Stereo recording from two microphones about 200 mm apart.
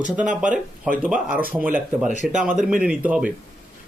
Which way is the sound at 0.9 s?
5° right (ahead or behind).